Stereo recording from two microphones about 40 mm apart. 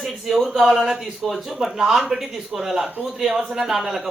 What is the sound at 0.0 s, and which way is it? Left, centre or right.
A man's voice, centre.